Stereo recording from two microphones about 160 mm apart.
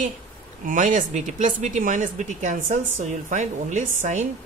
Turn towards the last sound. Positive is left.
turn(degrees=-50)  # may be behind; listen again after turning